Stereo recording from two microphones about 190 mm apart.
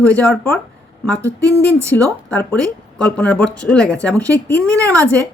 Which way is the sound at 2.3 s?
10° left (ahead or behind).